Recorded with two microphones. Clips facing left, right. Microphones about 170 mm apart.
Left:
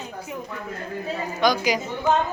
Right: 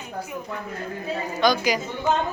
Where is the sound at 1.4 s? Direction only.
15° left (ahead or behind).